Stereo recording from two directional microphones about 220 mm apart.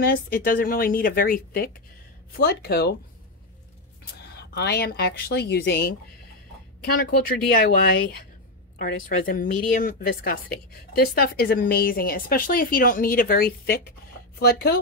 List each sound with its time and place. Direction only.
0.0 s speech: 40° left (ahead or behind)
4.0 s speech: 45° left (ahead or behind)